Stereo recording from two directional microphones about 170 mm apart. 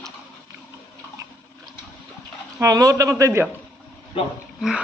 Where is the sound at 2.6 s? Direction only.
20° right (ahead or behind).